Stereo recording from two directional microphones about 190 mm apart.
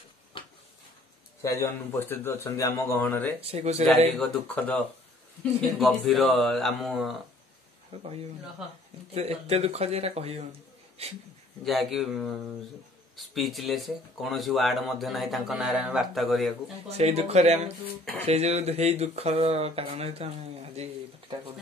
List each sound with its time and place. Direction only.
0.3 s a sound: 25° left (ahead or behind)
1.4 s speech: 10° left (ahead or behind)
3.3 s speech: 30° right (ahead or behind)
4.2 s speech: 10° left (ahead or behind)
7.9 s speech: 30° right (ahead or behind)
9.1 s speech: 35° right (ahead or behind)
11.6 s speech: centre (ahead or behind)
16.9 s speech: 35° right (ahead or behind)